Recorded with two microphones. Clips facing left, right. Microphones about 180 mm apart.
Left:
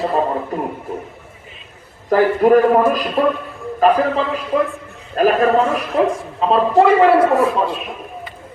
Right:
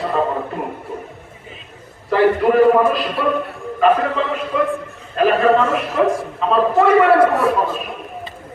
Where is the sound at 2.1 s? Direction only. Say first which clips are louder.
Left 1 dB; 45° left (ahead or behind).